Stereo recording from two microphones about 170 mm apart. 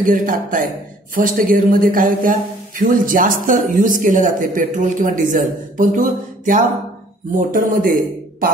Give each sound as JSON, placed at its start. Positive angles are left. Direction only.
{"t": 0.0, "sound": "speech", "side_deg": -50}